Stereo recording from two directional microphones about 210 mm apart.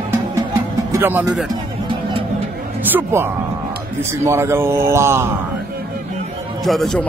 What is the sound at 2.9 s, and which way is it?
A man's voice, 10° right (ahead or behind).